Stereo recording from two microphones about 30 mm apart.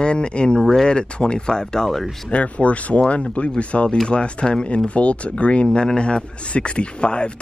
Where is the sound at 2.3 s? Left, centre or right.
Left.